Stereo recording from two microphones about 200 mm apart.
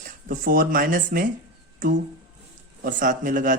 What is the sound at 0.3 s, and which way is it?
Speech, 45° right (ahead or behind).